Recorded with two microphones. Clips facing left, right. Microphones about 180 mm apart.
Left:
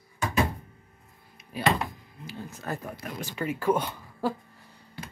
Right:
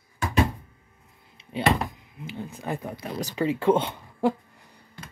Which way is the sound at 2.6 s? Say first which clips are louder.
Right 3 dB; 15° right (ahead or behind).